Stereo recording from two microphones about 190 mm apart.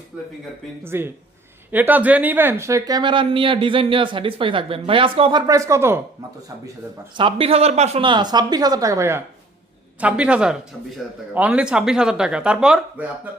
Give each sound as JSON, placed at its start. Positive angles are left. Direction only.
{"t": 0.9, "sound": "speech", "side_deg": -10}
{"t": 7.2, "sound": "speech", "side_deg": -30}